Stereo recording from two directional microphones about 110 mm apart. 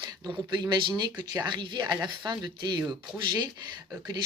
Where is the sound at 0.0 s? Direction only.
40° right (ahead or behind).